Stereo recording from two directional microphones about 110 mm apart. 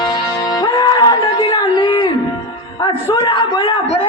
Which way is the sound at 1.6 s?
45° left (ahead or behind).